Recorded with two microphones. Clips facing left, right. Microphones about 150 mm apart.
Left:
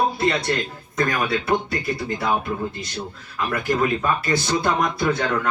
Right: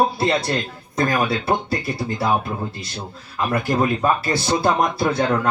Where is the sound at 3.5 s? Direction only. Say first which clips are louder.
Right 1 dB; 30° right (ahead or behind).